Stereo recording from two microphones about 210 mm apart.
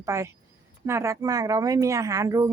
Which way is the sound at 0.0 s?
15° right (ahead or behind).